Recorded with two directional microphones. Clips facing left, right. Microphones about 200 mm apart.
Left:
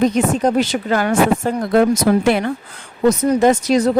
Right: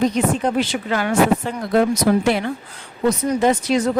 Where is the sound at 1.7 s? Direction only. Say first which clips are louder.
Left 2 dB; 60° left (ahead or behind).